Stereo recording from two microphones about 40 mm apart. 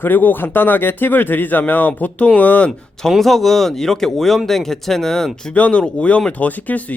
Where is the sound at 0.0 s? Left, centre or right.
Left.